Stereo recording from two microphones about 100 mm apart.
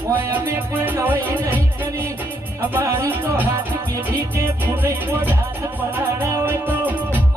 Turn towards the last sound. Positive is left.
turn(degrees=-20)  # may be behind; listen again after turning